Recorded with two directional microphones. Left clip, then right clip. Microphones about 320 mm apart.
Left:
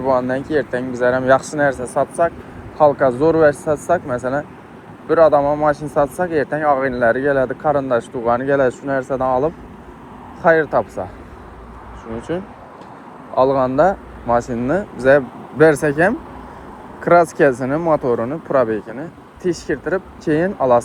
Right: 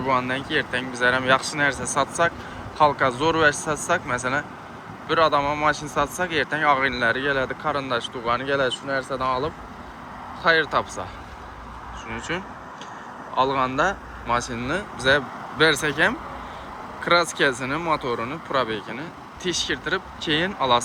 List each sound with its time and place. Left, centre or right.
0.1 s speech: centre
2.0 s speech: centre
2.7 s speech: centre
3.3 s speech: centre
3.7 s speech: centre
6.2 s speech: centre
7.4 s speech: centre
10.4 s speech: centre
12.3 s speech: centre
14.4 s speech: left
15.6 s speech: centre